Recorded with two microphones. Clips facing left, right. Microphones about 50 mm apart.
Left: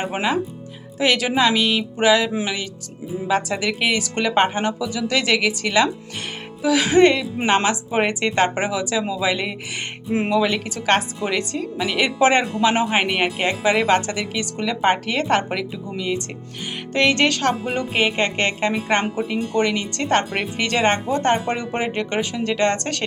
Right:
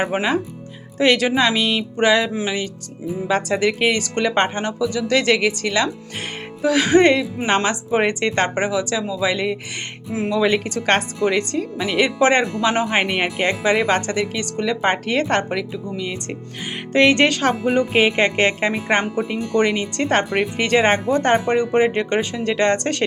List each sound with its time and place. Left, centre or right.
0.1 s speech: centre
3.2 s speech: centre
10.1 s speech: left
10.4 s speech: centre
16.9 s speech: centre
21.6 s speech: centre